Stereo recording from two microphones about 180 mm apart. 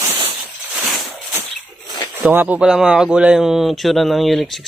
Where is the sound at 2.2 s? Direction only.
10° right (ahead or behind).